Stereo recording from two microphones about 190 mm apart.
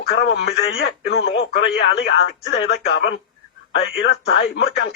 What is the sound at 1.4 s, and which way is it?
Speech, 75° left (ahead or behind).